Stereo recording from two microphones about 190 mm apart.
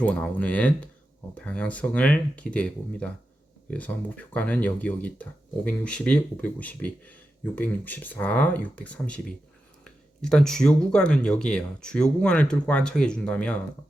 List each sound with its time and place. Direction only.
0.0 s speech: 5° left (ahead or behind)